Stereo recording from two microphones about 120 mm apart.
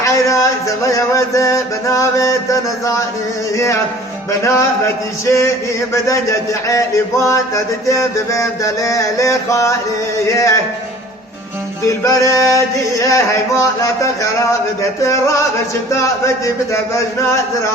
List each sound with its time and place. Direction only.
0.0 s speech: 25° left (ahead or behind)
0.9 s mantra: 25° left (ahead or behind)
11.9 s mantra: 25° left (ahead or behind)